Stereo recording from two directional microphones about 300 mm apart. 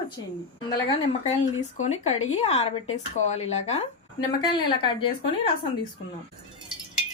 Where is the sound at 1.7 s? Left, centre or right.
Left.